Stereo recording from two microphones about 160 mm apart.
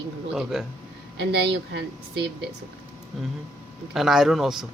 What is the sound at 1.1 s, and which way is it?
A woman's voice, 90° right.